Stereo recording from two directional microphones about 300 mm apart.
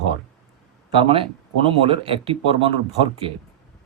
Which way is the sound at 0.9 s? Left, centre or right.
Centre.